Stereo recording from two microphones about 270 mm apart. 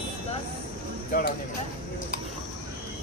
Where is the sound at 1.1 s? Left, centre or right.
Left.